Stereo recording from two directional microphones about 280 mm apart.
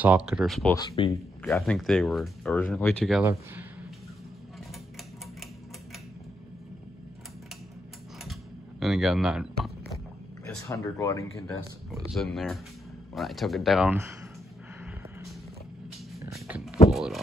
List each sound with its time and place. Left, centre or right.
0.0 s speech: centre
0.7 s speech: centre
1.4 s speech: centre
8.3 s typing: centre
10.4 s speech: centre
11.9 s speech: centre
16.3 s a sound: centre